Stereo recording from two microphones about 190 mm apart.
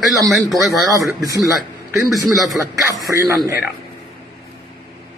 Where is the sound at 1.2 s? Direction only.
20° right (ahead or behind).